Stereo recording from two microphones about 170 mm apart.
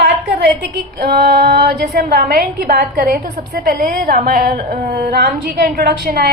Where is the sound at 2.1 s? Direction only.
65° right (ahead or behind).